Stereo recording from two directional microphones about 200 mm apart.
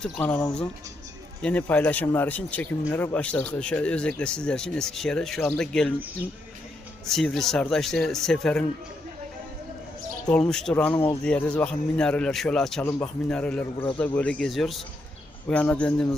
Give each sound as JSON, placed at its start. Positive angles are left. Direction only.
{"t": 0.0, "sound": "a man's voice", "side_deg": 10}
{"t": 7.0, "sound": "speech", "side_deg": 0}
{"t": 10.2, "sound": "a man's voice", "side_deg": 5}